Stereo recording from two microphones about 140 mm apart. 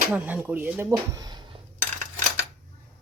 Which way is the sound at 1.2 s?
30° right (ahead or behind).